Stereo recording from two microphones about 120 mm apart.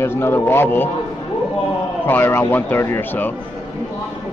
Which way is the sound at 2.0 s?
15° left (ahead or behind).